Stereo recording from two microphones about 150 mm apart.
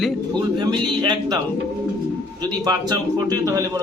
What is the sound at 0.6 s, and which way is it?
Speech, 30° right (ahead or behind).